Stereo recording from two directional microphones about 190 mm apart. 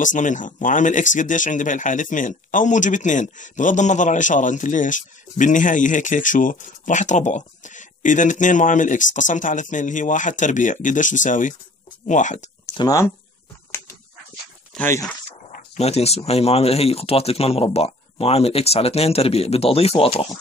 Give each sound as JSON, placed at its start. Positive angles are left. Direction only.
{"t": 0.0, "sound": "speech", "side_deg": 40}
{"t": 12.7, "sound": "speech", "side_deg": 20}
{"t": 14.7, "sound": "a sound", "side_deg": 10}
{"t": 15.5, "sound": "speech", "side_deg": 35}